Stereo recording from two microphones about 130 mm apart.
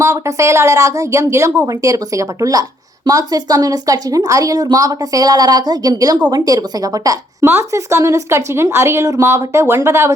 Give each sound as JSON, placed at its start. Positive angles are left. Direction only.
{"t": 0.0, "sound": "speech", "side_deg": -25}